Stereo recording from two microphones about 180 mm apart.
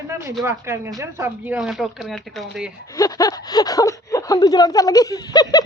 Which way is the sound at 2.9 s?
20° left (ahead or behind).